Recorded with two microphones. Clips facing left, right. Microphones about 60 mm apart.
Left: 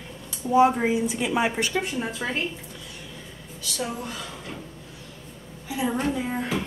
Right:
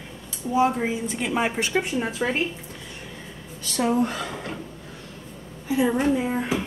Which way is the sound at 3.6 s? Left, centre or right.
Right.